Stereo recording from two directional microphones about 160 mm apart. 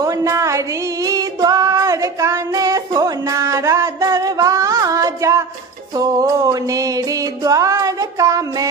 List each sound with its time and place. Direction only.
0.0 s music: 20° right (ahead or behind)
1.0 s female singing: 25° right (ahead or behind)
6.0 s music: 20° right (ahead or behind)